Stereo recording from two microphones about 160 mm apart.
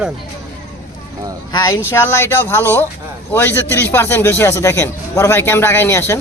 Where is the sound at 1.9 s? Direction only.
15° left (ahead or behind).